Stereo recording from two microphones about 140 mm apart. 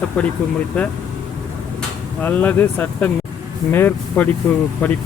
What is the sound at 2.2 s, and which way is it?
Speech, 15° left (ahead or behind).